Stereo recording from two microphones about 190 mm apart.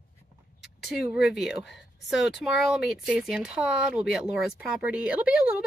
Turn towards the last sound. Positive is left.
turn(degrees=-5)  # may be behind; listen again after turning